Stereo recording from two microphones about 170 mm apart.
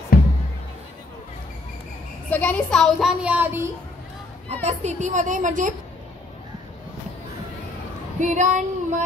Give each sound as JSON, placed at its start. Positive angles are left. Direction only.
{"t": 0.1, "sound": "music", "side_deg": 60}
{"t": 2.3, "sound": "a woman's voice", "side_deg": 10}
{"t": 4.6, "sound": "a woman's voice", "side_deg": -45}
{"t": 8.2, "sound": "a woman's voice", "side_deg": -45}